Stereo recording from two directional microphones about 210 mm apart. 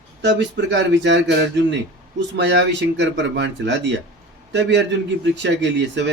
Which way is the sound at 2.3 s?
55° right (ahead or behind).